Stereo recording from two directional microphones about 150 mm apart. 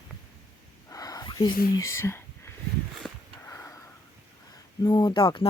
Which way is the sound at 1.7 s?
20° left (ahead or behind).